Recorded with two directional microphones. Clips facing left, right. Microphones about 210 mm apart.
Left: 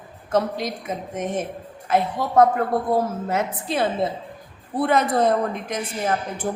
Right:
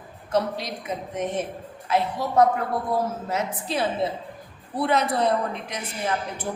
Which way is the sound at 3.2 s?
55° left (ahead or behind).